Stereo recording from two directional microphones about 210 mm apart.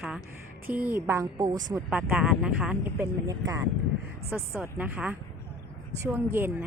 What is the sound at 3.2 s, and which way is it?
A woman's voice, 15° right (ahead or behind).